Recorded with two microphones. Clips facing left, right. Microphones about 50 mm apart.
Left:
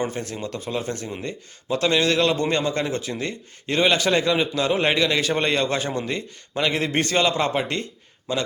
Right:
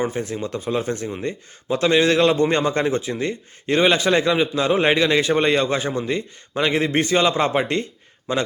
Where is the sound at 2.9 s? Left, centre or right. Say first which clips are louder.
Right 4 dB; centre.